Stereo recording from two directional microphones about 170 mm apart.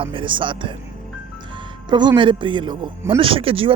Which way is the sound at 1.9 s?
25° right (ahead or behind).